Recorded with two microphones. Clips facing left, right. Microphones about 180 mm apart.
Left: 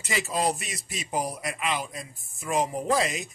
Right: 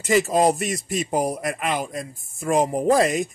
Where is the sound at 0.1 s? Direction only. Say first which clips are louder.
Right 9 dB; 50° right (ahead or behind).